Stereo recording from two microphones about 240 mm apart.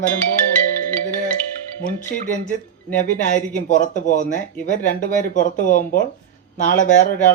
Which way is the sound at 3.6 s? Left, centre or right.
Left.